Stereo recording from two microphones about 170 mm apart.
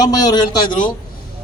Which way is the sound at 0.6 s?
50° left (ahead or behind).